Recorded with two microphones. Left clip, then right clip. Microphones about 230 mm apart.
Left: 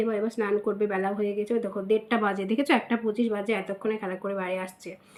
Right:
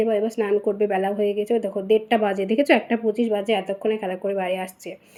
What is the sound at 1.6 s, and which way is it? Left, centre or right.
A woman's voice, centre.